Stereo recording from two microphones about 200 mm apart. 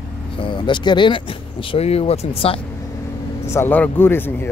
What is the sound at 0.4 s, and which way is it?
Speech, 25° left (ahead or behind).